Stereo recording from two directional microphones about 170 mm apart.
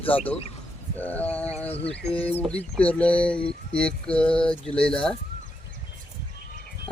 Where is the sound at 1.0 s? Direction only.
10° left (ahead or behind).